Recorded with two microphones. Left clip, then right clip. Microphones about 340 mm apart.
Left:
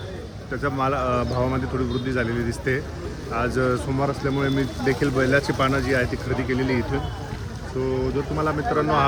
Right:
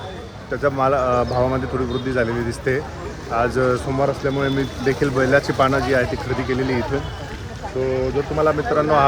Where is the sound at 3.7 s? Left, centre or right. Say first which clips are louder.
Right 4 dB; right.